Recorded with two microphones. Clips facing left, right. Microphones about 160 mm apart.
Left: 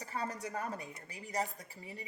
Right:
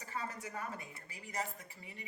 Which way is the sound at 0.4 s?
35° left (ahead or behind).